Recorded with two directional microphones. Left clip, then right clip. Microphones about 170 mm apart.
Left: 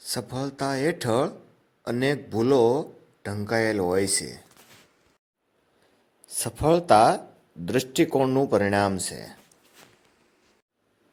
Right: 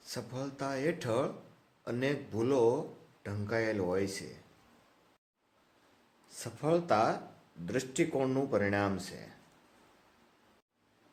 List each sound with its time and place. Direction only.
0.0 s speech: 50° left (ahead or behind)
6.2 s speech: 55° left (ahead or behind)